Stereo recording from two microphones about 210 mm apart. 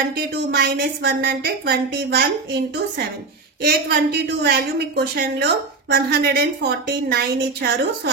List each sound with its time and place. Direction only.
0.3 s a woman's voice: 50° right (ahead or behind)
3.6 s a woman's voice: 50° right (ahead or behind)